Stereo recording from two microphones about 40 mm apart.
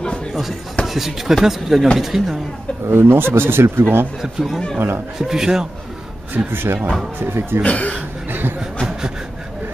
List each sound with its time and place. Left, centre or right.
0.3 s speech: centre
2.9 s speech: right
4.4 s speech: centre
4.7 s speech: right
5.2 s speech: centre
6.3 s speech: right
7.6 s speech: left
8.3 s a sound: right